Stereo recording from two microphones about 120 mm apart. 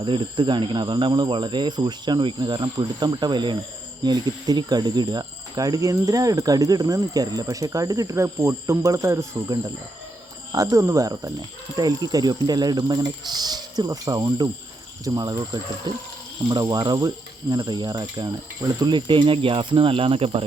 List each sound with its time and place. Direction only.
0.0 s speech: 40° right (ahead or behind)
16.5 s speech: 35° right (ahead or behind); by 20.4 s 50° right (ahead or behind)